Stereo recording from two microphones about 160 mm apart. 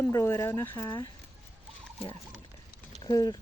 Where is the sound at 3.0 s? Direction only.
25° left (ahead or behind).